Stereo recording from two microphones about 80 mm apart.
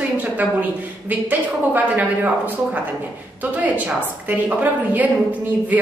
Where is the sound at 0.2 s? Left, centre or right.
Centre.